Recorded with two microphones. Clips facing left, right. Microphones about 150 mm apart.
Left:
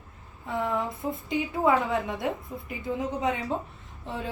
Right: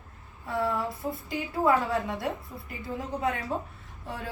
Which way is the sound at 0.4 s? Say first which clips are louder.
Right 1 dB; 20° left (ahead or behind).